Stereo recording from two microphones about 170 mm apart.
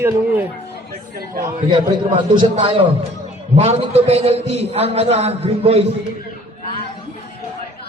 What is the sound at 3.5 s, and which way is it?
A man's voice, 35° right (ahead or behind).